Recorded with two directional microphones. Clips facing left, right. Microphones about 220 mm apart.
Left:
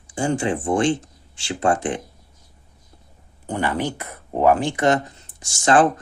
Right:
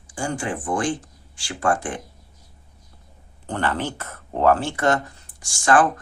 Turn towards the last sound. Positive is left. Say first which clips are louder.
# left 2 dB
turn(degrees=20)  # may be behind; listen again after turning